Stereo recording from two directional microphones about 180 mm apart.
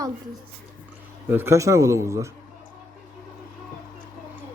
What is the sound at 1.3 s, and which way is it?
A man's voice, 15° right (ahead or behind).